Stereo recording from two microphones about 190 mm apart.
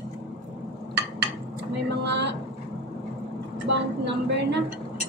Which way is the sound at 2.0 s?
65° right (ahead or behind).